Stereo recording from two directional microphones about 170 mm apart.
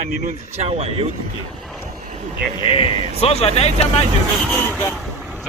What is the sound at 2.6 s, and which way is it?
Speech, 35° left (ahead or behind).